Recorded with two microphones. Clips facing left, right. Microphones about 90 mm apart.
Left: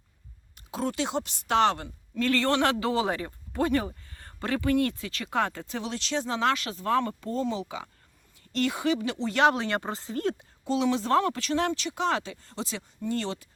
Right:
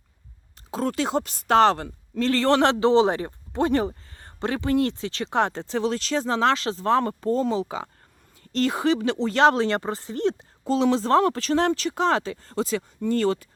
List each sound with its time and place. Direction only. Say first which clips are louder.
0.7 s speech: right 5 dB; 40° right (ahead or behind)
10.6 s speech: right 5 dB; 45° right (ahead or behind)